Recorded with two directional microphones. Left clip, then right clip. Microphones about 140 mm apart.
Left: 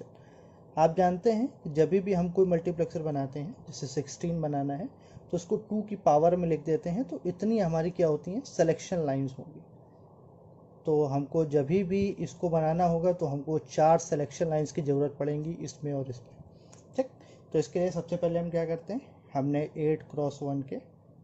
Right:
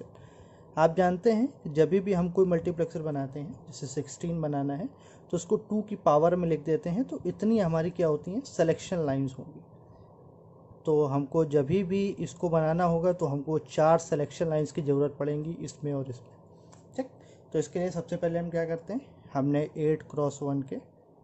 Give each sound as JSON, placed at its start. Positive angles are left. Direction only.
{"t": 0.7, "sound": "a man's voice", "side_deg": -15}
{"t": 3.4, "sound": "speech", "side_deg": 10}
{"t": 5.3, "sound": "a man's voice", "side_deg": -25}
{"t": 10.9, "sound": "a man's voice", "side_deg": -20}
{"t": 17.5, "sound": "a man's voice", "side_deg": 0}
{"t": 19.4, "sound": "speech", "side_deg": -20}